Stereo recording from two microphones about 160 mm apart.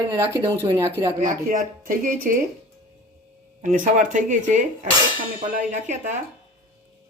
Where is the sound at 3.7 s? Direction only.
55° right (ahead or behind).